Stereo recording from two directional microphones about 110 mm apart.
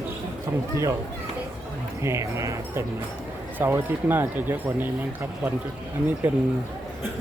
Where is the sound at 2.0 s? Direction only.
25° right (ahead or behind).